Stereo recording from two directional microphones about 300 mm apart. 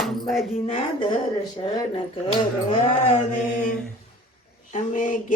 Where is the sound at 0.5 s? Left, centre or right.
Centre.